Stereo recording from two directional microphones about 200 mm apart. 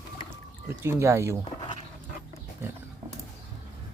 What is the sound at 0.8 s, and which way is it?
Speech, 15° right (ahead or behind).